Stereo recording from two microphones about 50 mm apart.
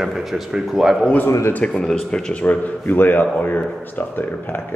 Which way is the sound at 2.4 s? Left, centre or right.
Left.